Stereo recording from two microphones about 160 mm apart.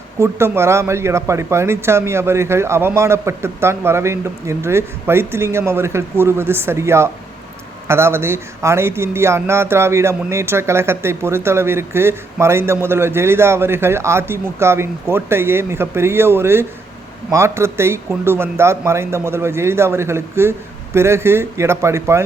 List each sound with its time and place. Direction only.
0.2 s speech: 15° right (ahead or behind)